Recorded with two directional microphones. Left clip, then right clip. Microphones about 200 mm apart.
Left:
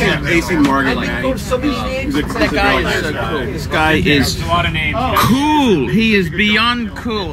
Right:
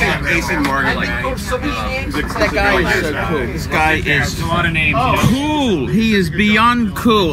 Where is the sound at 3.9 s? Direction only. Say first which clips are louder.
Left 2 dB; 35° right (ahead or behind); by 6.3 s 15° right (ahead or behind).